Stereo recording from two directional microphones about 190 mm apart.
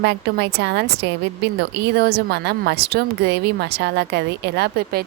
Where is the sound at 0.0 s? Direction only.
60° right (ahead or behind).